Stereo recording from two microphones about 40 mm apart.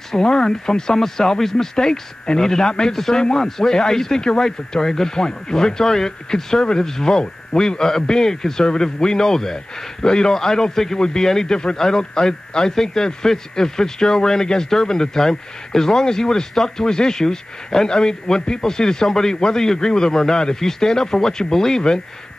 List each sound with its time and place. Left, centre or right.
0.1 s a man's voice: centre